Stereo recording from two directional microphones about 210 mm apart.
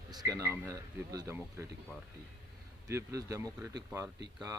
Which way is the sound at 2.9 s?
15° right (ahead or behind).